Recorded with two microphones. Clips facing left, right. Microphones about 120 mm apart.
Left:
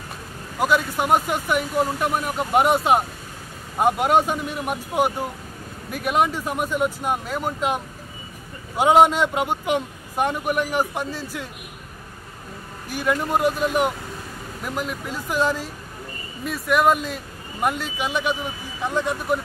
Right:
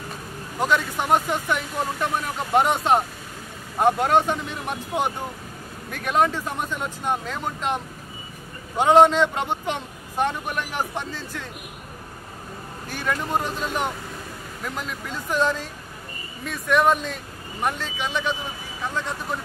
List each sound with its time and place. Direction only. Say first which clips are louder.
0.6 s a man's voice: left 2 dB; 10° left (ahead or behind)
12.9 s a man's voice: left 3 dB; 10° left (ahead or behind)